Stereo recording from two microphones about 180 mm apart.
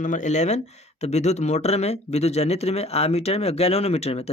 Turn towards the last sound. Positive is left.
turn(degrees=35)  # may be behind; listen again after turning